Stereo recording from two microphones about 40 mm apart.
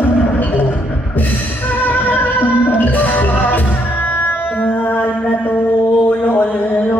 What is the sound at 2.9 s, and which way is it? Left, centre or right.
Music, left.